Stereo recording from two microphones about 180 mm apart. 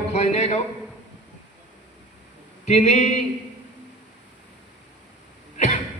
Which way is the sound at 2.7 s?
40° left (ahead or behind).